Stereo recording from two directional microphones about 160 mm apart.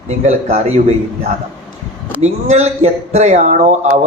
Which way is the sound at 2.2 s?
45° right (ahead or behind).